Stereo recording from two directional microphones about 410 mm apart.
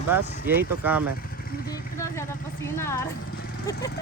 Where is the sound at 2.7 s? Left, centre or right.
Centre.